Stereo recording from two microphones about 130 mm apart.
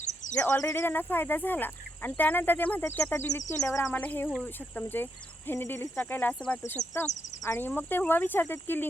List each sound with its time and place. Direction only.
0.3 s speech: 20° left (ahead or behind)
3.9 s speech: 10° left (ahead or behind)
6.8 s speech: 25° left (ahead or behind)